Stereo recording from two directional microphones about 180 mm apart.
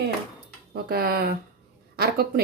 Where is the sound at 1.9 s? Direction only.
60° right (ahead or behind).